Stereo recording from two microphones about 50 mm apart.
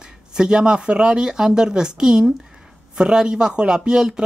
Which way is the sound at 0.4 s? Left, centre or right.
Centre.